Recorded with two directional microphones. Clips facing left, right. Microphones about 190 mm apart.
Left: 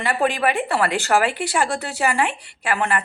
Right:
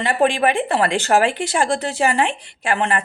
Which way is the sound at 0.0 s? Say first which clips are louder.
Right 3 dB; 20° right (ahead or behind).